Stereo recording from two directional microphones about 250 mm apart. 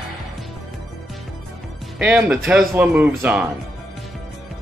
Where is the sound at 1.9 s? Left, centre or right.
Centre.